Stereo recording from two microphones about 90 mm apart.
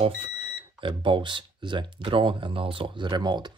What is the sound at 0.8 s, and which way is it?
Speech, 65° right (ahead or behind).